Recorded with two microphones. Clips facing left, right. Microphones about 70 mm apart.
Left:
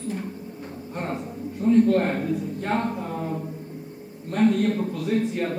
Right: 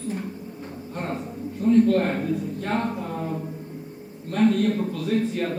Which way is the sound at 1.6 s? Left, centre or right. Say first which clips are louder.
Even; left.